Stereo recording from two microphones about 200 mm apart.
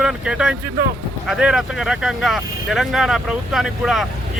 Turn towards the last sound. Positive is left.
turn(degrees=0)  # may be behind; listen again after turning